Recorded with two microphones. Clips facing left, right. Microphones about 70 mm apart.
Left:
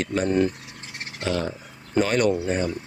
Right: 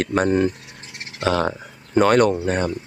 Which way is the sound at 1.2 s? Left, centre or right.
Right.